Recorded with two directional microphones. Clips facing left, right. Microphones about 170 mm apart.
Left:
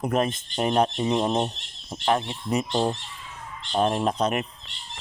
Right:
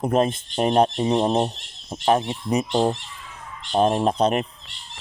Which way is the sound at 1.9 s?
20° right (ahead or behind).